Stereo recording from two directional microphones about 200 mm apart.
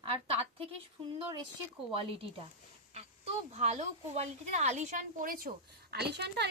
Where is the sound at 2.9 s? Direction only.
30° right (ahead or behind).